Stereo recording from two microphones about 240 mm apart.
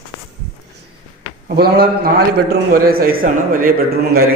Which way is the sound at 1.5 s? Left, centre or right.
Right.